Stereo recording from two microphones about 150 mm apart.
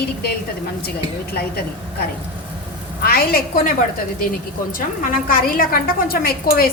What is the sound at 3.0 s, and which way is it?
Speech, 90° left.